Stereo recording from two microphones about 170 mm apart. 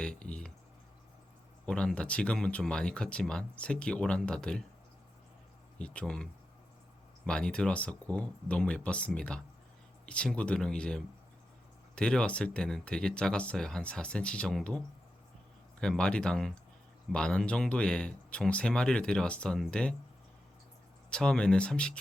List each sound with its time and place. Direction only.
0.0 s a sound: 5° left (ahead or behind)
1.6 s speech: 5° left (ahead or behind)
5.8 s speech: 5° left (ahead or behind)
7.3 s speech: 5° left (ahead or behind)
21.1 s speech: 5° left (ahead or behind)